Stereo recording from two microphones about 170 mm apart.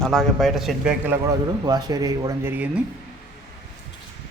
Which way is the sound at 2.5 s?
10° right (ahead or behind).